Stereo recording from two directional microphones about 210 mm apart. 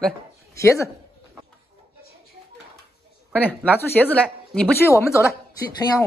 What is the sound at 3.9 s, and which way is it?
A woman's voice, 5° left (ahead or behind).